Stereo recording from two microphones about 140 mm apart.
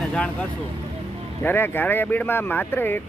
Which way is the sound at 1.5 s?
15° left (ahead or behind).